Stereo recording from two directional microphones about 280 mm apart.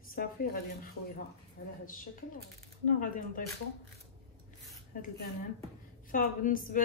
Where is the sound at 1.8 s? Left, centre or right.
Left.